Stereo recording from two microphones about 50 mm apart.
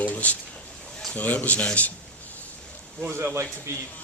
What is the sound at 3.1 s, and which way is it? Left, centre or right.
Speech, right.